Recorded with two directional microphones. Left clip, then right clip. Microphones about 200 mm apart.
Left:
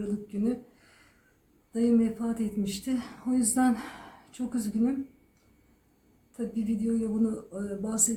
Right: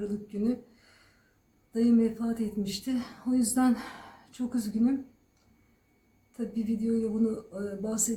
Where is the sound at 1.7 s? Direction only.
5° right (ahead or behind).